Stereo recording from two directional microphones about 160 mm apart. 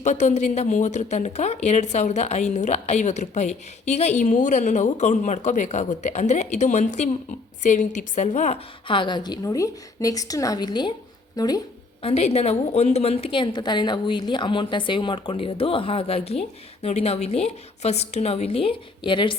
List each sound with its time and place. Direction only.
0.0 s a woman's voice: 50° left (ahead or behind); by 11.6 s 25° left (ahead or behind)
12.0 s a woman's voice: 40° left (ahead or behind)